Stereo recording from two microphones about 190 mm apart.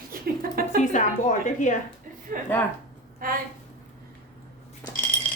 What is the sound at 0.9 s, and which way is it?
Speech, 40° left (ahead or behind).